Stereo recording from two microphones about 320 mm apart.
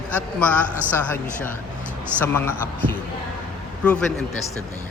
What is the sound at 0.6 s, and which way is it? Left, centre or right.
Speech, centre.